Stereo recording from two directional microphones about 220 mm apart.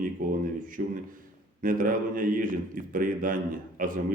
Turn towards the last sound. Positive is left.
turn(degrees=-35)  # may be behind; listen again after turning